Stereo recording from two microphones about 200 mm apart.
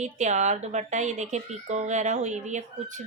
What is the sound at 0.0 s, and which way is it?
Speech, 35° right (ahead or behind).